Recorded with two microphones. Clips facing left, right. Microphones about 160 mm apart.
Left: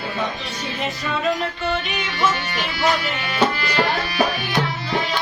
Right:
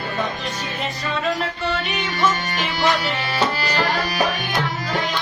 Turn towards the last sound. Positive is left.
turn(degrees=-40)  # may be behind; listen again after turning